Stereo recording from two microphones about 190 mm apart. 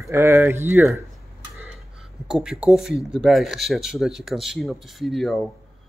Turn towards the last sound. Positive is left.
turn(degrees=0)  # may be behind; listen again after turning